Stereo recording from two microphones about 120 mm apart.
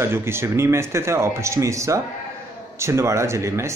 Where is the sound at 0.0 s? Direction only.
20° right (ahead or behind).